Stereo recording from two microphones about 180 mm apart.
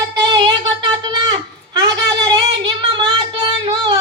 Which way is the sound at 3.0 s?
25° right (ahead or behind).